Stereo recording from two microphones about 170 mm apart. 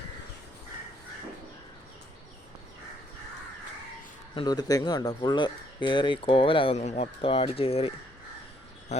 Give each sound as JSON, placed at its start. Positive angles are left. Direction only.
{"t": 4.4, "sound": "speech", "side_deg": 25}